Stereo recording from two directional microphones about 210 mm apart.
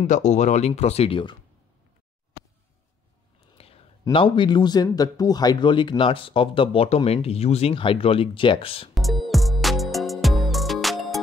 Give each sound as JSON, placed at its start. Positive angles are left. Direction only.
{"t": 0.0, "sound": "speech", "side_deg": 35}
{"t": 3.5, "sound": "a sound", "side_deg": 30}
{"t": 4.0, "sound": "speech", "side_deg": 25}
{"t": 8.9, "sound": "music", "side_deg": 0}